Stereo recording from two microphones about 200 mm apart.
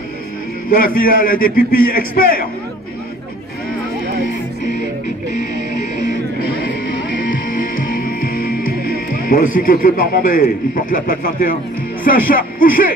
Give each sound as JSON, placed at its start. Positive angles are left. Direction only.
{"t": 0.7, "sound": "a man's voice", "side_deg": 45}
{"t": 7.5, "sound": "music", "side_deg": 45}
{"t": 9.3, "sound": "a man's voice", "side_deg": 45}